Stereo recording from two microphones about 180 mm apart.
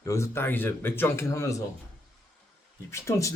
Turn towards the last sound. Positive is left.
turn(degrees=15)  # may be behind; listen again after turning